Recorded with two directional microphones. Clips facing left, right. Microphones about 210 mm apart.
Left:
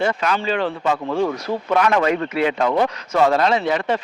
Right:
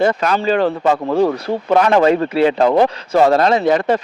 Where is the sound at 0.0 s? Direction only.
40° right (ahead or behind).